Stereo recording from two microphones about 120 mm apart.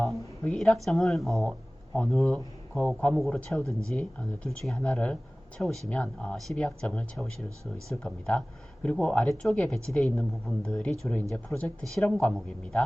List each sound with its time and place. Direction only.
0.4 s speech: 5° left (ahead or behind)
3.6 s speech: 25° right (ahead or behind)
3.8 s speech: 5° left (ahead or behind)